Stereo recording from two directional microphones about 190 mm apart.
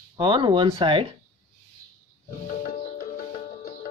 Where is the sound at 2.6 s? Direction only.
45° left (ahead or behind).